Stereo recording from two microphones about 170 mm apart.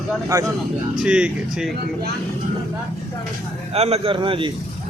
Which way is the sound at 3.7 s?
40° right (ahead or behind).